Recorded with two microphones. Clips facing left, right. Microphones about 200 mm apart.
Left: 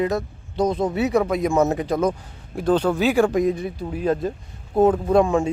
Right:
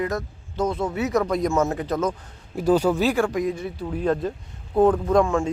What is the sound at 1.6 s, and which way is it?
Speech, 15° left (ahead or behind).